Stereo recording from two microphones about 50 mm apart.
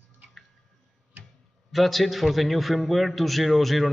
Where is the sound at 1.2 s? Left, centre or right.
Right.